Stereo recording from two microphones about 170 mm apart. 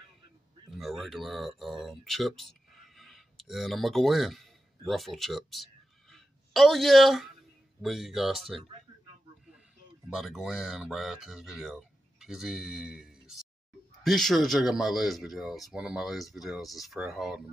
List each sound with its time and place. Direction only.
0.7 s speech: centre (ahead or behind)
3.0 s a sound: centre (ahead or behind)
7.8 s speech: centre (ahead or behind)
10.0 s speech: centre (ahead or behind)